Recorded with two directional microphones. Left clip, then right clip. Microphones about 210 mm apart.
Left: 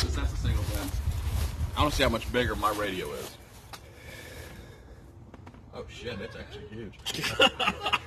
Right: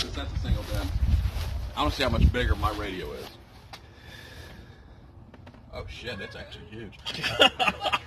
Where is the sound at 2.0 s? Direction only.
25° left (ahead or behind).